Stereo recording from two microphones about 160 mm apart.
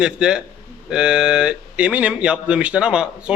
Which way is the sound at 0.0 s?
5° right (ahead or behind).